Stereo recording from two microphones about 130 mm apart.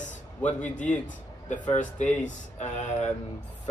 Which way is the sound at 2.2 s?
65° left (ahead or behind).